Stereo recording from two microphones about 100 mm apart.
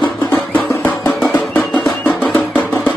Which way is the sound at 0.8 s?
25° left (ahead or behind).